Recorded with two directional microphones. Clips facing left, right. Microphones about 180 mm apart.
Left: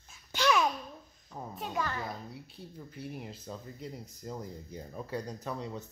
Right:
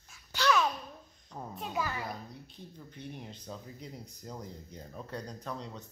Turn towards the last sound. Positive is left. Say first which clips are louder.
# left 3 dB
turn(degrees=10)  # may be behind; listen again after turning